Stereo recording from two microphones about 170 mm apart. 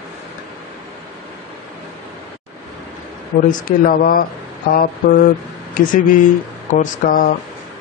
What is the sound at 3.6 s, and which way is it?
Speech, 55° left (ahead or behind).